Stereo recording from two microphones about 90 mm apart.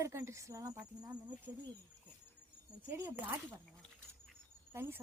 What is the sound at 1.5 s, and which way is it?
Speech, 20° right (ahead or behind).